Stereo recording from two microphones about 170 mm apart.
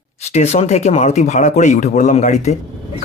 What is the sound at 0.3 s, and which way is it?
Speech, 40° left (ahead or behind).